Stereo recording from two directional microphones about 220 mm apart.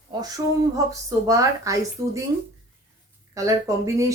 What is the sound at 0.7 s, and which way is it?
Speech, 15° right (ahead or behind).